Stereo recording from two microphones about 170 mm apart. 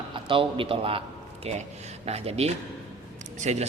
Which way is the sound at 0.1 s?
30° right (ahead or behind).